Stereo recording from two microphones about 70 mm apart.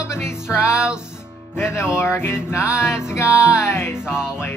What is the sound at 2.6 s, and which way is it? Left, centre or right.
Music, centre.